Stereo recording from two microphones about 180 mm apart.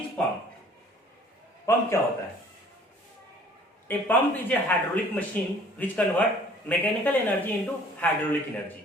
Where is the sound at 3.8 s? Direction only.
10° left (ahead or behind).